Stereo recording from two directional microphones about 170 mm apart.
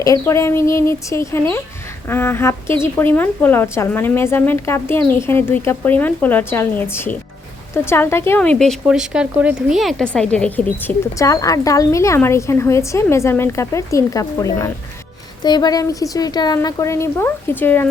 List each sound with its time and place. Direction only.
0.0 s a woman's voice: 20° left (ahead or behind)